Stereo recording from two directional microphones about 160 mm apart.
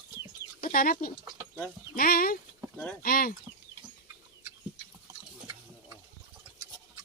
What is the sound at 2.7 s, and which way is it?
Speech, 5° left (ahead or behind).